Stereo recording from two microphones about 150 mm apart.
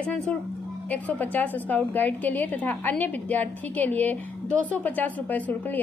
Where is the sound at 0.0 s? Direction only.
5° left (ahead or behind).